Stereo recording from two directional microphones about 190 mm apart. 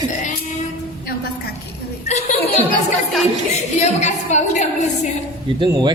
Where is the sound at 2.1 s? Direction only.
35° left (ahead or behind).